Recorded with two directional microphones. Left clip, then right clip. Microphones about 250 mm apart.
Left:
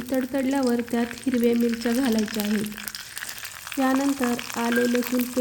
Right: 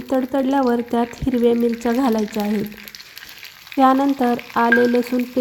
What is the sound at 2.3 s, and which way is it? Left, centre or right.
Frying, centre.